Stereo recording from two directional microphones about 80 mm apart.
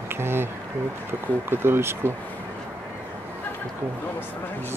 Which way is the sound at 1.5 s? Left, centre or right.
Right.